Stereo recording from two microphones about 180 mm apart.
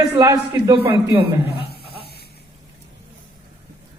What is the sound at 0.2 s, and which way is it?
Speech, 20° right (ahead or behind).